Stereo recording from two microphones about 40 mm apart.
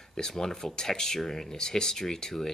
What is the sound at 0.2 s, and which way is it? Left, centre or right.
Speech, centre.